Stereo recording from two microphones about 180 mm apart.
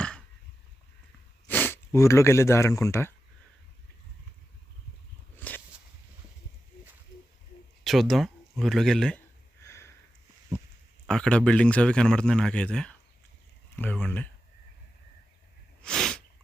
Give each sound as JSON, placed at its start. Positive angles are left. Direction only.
{"t": 1.5, "sound": "speech", "side_deg": 10}
{"t": 5.4, "sound": "a sound", "side_deg": 10}
{"t": 7.9, "sound": "speech", "side_deg": 0}
{"t": 9.6, "sound": "sniff", "side_deg": 15}
{"t": 11.0, "sound": "speech", "side_deg": 5}
{"t": 15.8, "sound": "sneeze", "side_deg": 0}